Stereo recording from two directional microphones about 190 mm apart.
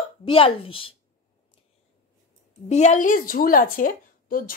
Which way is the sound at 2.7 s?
40° left (ahead or behind).